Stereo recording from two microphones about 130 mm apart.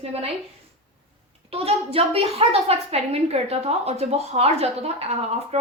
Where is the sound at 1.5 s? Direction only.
50° right (ahead or behind).